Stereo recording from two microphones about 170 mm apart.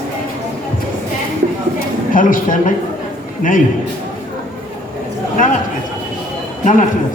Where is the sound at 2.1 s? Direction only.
55° left (ahead or behind).